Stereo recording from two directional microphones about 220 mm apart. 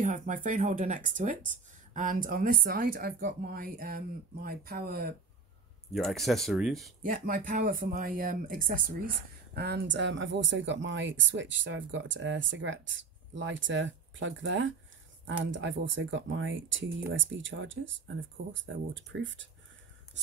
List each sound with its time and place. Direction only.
0.0 s speech: 35° right (ahead or behind)
5.9 s speech: centre (ahead or behind)
7.0 s speech: 40° right (ahead or behind); by 19.5 s 55° right (ahead or behind)